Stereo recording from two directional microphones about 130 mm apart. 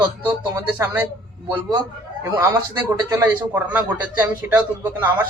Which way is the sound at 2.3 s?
20° right (ahead or behind).